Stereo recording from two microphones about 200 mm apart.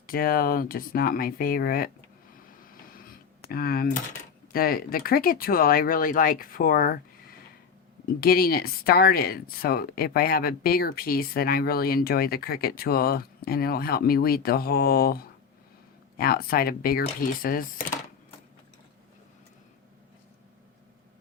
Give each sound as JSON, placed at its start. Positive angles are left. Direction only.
{"t": 0.1, "sound": "speech", "side_deg": 45}
{"t": 2.9, "sound": "a sound", "side_deg": 45}
{"t": 4.5, "sound": "speech", "side_deg": 50}